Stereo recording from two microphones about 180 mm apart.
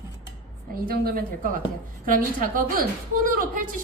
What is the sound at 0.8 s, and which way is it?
A woman's voice, 55° right (ahead or behind).